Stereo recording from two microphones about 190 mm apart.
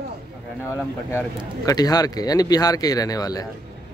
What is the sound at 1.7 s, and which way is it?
Speech, 20° left (ahead or behind).